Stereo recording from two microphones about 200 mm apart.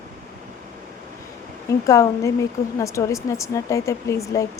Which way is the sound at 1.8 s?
15° left (ahead or behind).